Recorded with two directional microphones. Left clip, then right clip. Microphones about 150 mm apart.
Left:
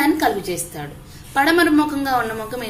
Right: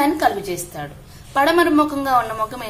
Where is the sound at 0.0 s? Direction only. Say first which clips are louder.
Even; 25° right (ahead or behind).